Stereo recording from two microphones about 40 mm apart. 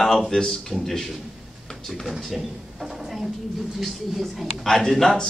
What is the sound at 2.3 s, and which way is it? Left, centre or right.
Drawer open or close, centre.